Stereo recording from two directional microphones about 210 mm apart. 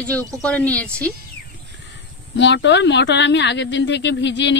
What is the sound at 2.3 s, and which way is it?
Speech, 55° left (ahead or behind).